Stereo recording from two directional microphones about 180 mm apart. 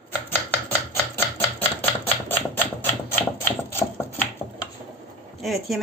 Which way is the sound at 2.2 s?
10° left (ahead or behind).